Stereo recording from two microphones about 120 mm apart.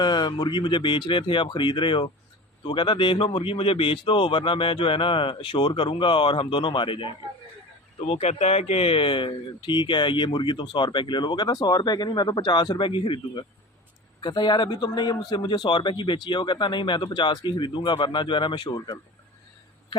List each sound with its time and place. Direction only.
0.0 s speech: 40° left (ahead or behind)
8.0 s speech: 60° left (ahead or behind); by 18.9 s 40° left (ahead or behind)